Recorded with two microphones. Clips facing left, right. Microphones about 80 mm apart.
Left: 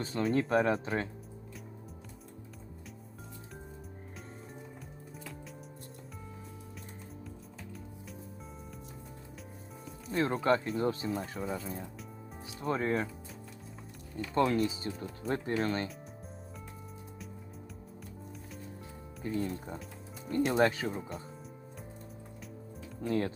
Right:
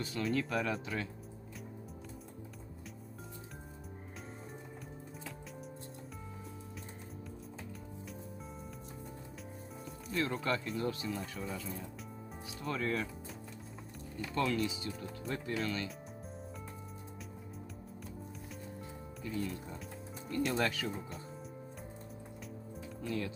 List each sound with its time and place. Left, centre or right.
0.0 s speech: left
10.1 s speech: left
14.3 s speech: left
19.2 s speech: left
23.0 s speech: left